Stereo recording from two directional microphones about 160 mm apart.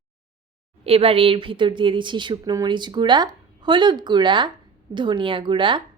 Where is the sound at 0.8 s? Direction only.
35° right (ahead or behind).